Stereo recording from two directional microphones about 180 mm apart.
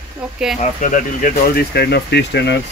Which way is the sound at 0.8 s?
45° left (ahead or behind).